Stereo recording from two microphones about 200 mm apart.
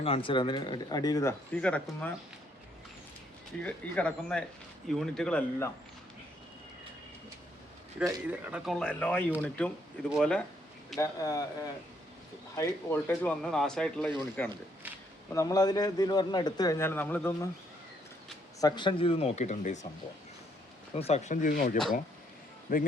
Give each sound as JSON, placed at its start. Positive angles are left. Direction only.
{"t": 0.0, "sound": "speech", "side_deg": 25}
{"t": 3.6, "sound": "speech", "side_deg": 5}
{"t": 7.9, "sound": "speech", "side_deg": -5}
{"t": 11.0, "sound": "a man's voice", "side_deg": 15}
{"t": 15.3, "sound": "a man's voice", "side_deg": 15}
{"t": 18.6, "sound": "speech", "side_deg": 25}
{"t": 20.9, "sound": "speech", "side_deg": 30}